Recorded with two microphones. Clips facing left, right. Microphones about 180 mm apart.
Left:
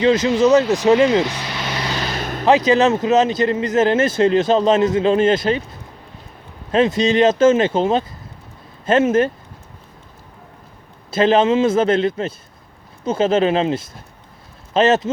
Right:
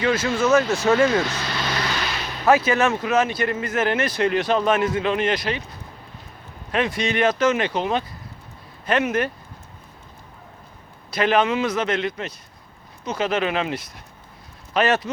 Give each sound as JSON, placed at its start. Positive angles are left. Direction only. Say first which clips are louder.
{"t": 0.0, "sound": "speech", "louder": "left 7 dB", "side_deg": 20}
{"t": 0.7, "sound": "vehicle", "louder": "left 5 dB", "side_deg": 15}
{"t": 2.1, "sound": "vehicle", "louder": "left 6 dB", "side_deg": 50}
{"t": 2.5, "sound": "speech", "louder": "left 4 dB", "side_deg": 20}
{"t": 6.7, "sound": "speech", "louder": "left 7 dB", "side_deg": 25}
{"t": 11.1, "sound": "speech", "louder": "left 5 dB", "side_deg": 25}